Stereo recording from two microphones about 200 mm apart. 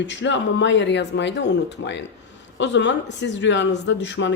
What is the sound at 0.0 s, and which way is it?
Speech, 65° left (ahead or behind).